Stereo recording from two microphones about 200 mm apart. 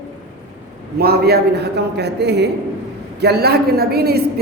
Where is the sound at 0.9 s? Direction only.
50° right (ahead or behind).